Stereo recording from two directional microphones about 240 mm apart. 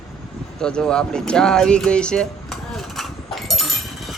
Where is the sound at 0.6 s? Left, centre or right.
Centre.